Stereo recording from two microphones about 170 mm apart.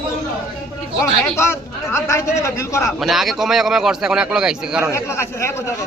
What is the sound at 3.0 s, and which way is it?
A man's voice, centre (ahead or behind).